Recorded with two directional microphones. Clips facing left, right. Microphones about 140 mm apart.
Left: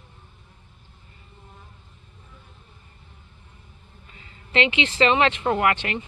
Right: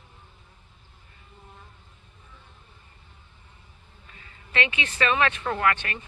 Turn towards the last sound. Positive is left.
turn(degrees=20)  # may be behind; listen again after turning